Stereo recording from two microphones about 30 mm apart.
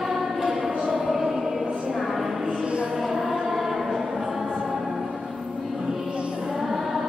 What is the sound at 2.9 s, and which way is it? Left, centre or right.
Choir, centre.